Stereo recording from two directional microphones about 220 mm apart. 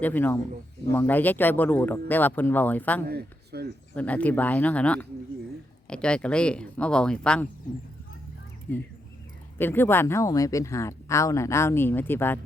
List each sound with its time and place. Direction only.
0.0 s speech: 10° left (ahead or behind)
3.1 s speech: 45° right (ahead or behind)
3.9 s speech: 5° left (ahead or behind)
8.7 s speech: 10° left (ahead or behind)